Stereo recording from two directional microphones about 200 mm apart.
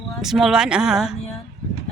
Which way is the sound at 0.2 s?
Centre (ahead or behind).